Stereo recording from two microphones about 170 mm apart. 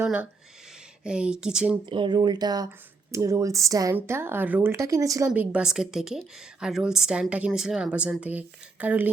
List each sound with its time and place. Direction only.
0.0 s a woman's voice: 10° right (ahead or behind)
1.9 s speech: 30° right (ahead or behind)
5.3 s a woman's voice: 5° right (ahead or behind)